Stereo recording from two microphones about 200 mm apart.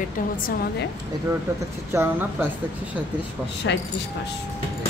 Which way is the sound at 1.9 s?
10° right (ahead or behind).